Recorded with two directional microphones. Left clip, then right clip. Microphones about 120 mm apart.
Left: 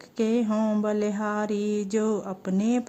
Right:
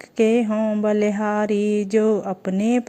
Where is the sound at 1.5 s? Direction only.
60° left (ahead or behind).